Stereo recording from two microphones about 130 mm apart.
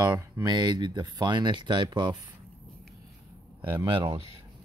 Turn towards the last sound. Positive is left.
turn(degrees=-40)  # may be behind; listen again after turning